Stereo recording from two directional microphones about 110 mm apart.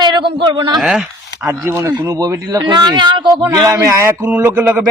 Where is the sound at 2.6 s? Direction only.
40° right (ahead or behind).